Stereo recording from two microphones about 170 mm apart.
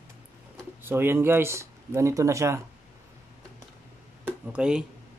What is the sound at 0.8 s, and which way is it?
Speech, 15° right (ahead or behind).